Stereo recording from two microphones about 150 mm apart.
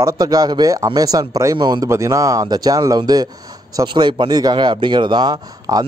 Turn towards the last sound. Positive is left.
turn(degrees=-25)  # may be behind; listen again after turning